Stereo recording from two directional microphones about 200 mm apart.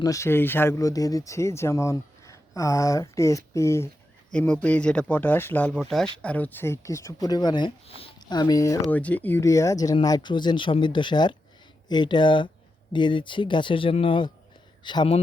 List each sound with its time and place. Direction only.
0.0 s speech: 15° left (ahead or behind)